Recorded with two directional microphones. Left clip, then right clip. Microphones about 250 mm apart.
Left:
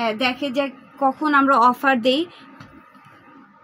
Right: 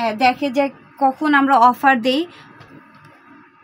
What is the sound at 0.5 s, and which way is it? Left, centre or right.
A woman's voice, right.